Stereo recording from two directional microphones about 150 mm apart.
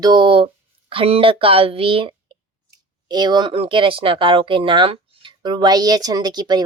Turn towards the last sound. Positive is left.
turn(degrees=-25)  # may be behind; listen again after turning